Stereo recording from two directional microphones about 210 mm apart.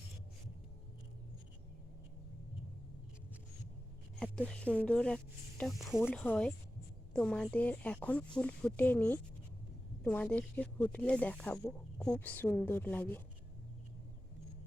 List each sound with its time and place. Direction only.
4.2 s speech: 5° left (ahead or behind)